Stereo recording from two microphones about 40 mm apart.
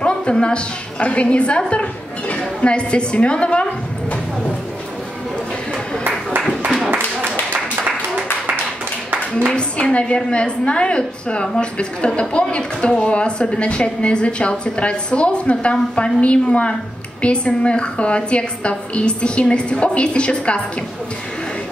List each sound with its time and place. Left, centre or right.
0.0 s a woman's voice: left
9.9 s a woman's voice: left